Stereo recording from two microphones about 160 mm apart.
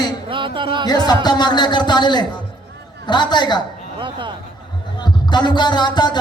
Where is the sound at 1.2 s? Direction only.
25° left (ahead or behind).